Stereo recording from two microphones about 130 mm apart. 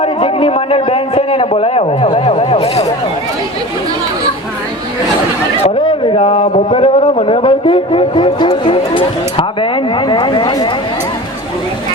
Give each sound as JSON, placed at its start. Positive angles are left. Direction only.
{"t": 0.0, "sound": "a man's voice", "side_deg": 45}
{"t": 5.8, "sound": "a man's voice", "side_deg": 40}